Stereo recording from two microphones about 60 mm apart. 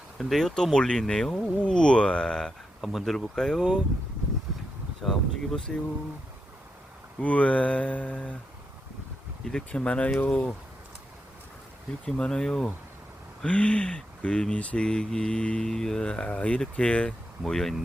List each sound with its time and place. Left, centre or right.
0.2 s speech: centre
2.8 s speech: centre
5.0 s speech: centre
7.2 s speech: left
9.4 s speech: centre
12.0 s speech: centre
13.4 s speech: centre
17.4 s speech: centre